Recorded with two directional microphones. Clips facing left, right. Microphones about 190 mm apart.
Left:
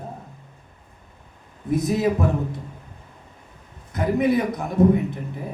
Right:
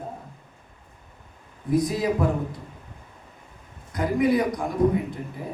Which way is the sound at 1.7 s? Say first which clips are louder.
Left 1 dB; 25° left (ahead or behind).